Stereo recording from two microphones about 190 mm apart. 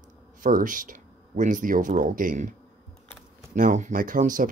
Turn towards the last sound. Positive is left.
turn(degrees=-45)  # may be behind; listen again after turning